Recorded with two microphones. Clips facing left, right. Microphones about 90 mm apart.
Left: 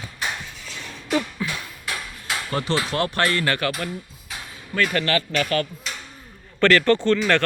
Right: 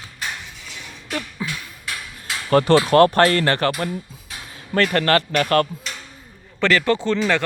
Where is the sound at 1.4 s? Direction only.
20° right (ahead or behind).